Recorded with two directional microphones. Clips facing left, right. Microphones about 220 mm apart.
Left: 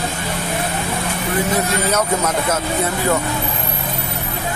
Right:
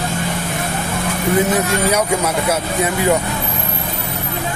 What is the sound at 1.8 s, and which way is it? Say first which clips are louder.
Speech: right 2 dB; 10° right (ahead or behind).